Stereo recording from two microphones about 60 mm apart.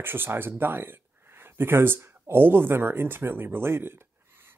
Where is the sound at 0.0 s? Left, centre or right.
Right.